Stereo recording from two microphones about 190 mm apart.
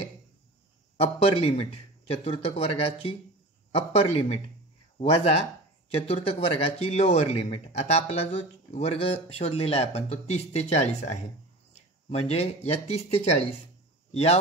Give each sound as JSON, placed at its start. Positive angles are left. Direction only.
{"t": 0.9, "sound": "speech", "side_deg": 30}